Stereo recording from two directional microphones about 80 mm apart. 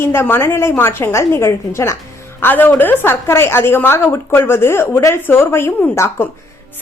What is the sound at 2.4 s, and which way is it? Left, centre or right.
A woman's voice, left.